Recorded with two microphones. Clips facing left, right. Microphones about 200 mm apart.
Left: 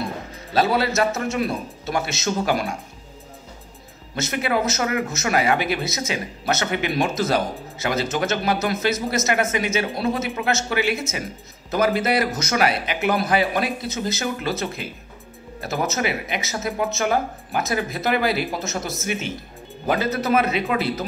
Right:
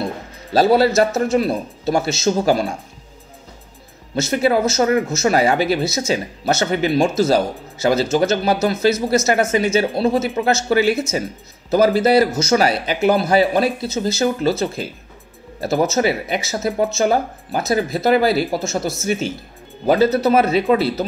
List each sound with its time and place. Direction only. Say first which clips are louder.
0.5 s speech: right 7 dB; 35° right (ahead or behind)
4.1 s speech: right 6 dB; 30° right (ahead or behind)